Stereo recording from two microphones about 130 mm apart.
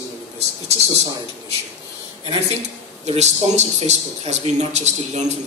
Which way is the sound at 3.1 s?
60° right (ahead or behind).